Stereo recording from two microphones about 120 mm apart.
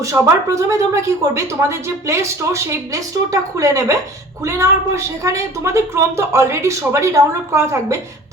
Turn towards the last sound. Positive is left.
turn(degrees=-25)  # may be behind; listen again after turning